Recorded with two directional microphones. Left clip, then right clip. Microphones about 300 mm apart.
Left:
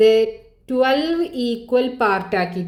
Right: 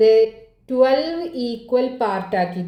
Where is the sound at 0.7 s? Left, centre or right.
Left.